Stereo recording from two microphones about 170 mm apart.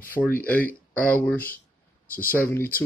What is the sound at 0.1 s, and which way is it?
Speech, 10° left (ahead or behind).